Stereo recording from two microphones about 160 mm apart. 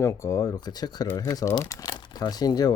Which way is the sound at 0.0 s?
20° left (ahead or behind).